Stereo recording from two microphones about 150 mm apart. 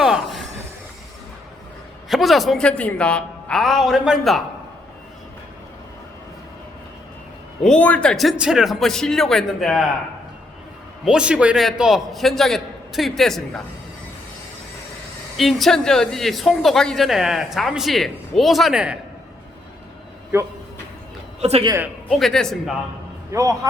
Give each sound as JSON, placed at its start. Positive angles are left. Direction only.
{"t": 0.0, "sound": "a sound", "side_deg": 0}
{"t": 2.0, "sound": "a woman's voice", "side_deg": 0}
{"t": 7.6, "sound": "a woman's voice", "side_deg": 5}
{"t": 11.0, "sound": "a woman's voice", "side_deg": -5}
{"t": 15.4, "sound": "a woman's voice", "side_deg": 0}
{"t": 20.3, "sound": "speech", "side_deg": -15}
{"t": 21.4, "sound": "a man's voice", "side_deg": -45}
{"t": 22.1, "sound": "a woman's voice", "side_deg": 5}
{"t": 23.3, "sound": "a man's voice", "side_deg": -25}